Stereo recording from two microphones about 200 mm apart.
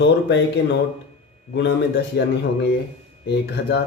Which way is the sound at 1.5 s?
60° left (ahead or behind).